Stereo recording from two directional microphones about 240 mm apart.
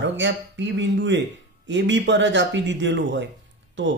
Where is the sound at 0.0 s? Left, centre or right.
Right.